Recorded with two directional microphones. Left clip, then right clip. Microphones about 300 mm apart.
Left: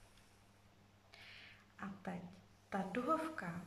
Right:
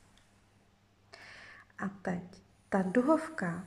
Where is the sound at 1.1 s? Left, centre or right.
Right.